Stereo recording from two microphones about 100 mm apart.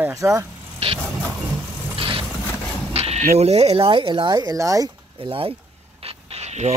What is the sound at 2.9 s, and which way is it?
Speech, 90° right.